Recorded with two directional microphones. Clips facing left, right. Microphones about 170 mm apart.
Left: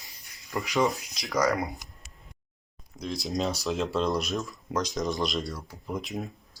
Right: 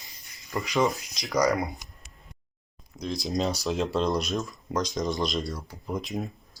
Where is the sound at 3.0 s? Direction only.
Centre (ahead or behind).